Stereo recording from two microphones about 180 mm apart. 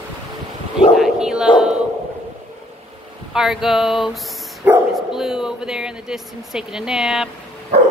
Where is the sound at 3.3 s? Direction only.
Centre (ahead or behind).